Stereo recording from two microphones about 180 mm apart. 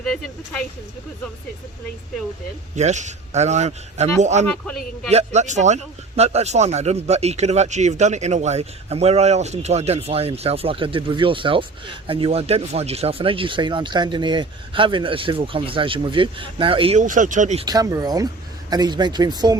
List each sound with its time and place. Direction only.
0.0 s speech: 5° left (ahead or behind)
2.7 s speech: 40° right (ahead or behind)
4.4 s speech: 5° left (ahead or behind)
5.1 s speech: 40° right (ahead or behind)
17.0 s speech: 45° right (ahead or behind)
17.7 s speech: 20° right (ahead or behind)